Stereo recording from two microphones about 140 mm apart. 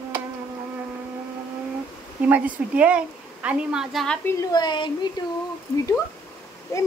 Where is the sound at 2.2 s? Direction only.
10° right (ahead or behind).